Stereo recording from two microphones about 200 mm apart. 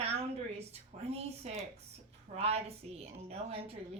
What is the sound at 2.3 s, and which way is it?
A woman's voice, 30° right (ahead or behind).